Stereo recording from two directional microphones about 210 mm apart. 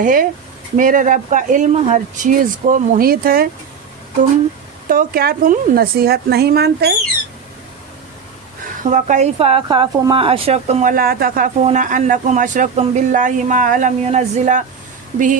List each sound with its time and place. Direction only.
0.0 s speech: 40° right (ahead or behind)
4.9 s a woman's voice: 45° right (ahead or behind)
8.8 s speech: 35° right (ahead or behind)